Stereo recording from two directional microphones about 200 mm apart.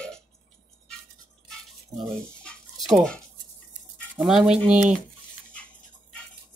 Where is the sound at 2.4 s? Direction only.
Centre (ahead or behind).